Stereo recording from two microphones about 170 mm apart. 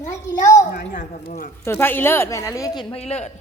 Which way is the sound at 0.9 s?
50° left (ahead or behind).